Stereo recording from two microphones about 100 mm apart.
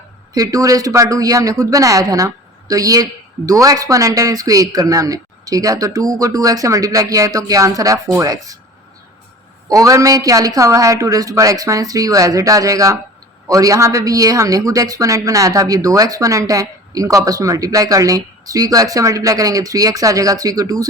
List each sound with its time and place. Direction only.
0.3 s speech: 35° right (ahead or behind)
9.6 s speech: 35° right (ahead or behind)